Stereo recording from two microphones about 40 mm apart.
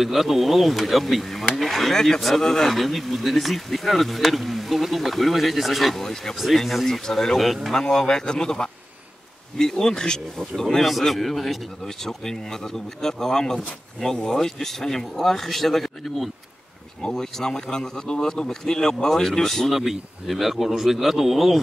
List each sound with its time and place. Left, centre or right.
0.0 s speech: centre
7.3 s speech: centre
7.7 s speech: centre
10.6 s speech: centre
17.0 s speech: centre
19.7 s speech: centre